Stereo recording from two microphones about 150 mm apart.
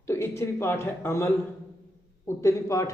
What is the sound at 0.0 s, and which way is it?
A man's voice, 15° left (ahead or behind).